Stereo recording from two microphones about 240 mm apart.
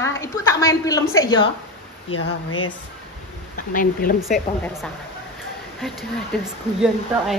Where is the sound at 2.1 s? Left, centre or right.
Left.